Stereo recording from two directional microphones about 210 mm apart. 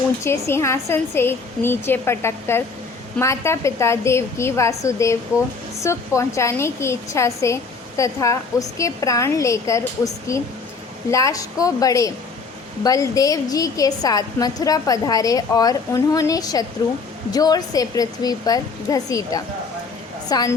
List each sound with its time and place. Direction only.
0.3 s a woman's voice: 10° left (ahead or behind)